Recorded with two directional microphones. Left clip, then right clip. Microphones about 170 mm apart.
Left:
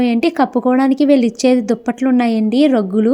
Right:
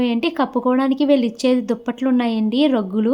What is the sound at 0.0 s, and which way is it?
A woman's voice, 25° left (ahead or behind).